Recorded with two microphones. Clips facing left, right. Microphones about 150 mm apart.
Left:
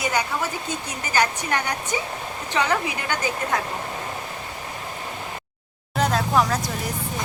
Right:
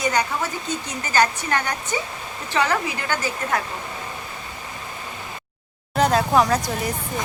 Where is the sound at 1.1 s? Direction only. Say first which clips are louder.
Right 2 dB; 15° left (ahead or behind).